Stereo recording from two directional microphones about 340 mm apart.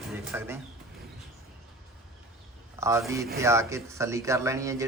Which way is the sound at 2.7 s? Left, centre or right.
Centre.